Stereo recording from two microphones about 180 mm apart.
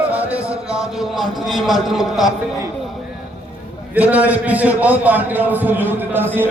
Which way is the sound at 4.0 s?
10° right (ahead or behind).